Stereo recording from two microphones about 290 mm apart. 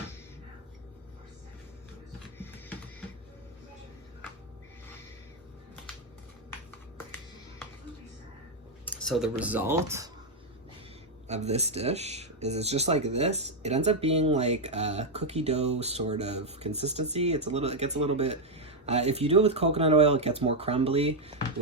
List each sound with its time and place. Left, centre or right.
8.8 s speech: centre
11.3 s speech: right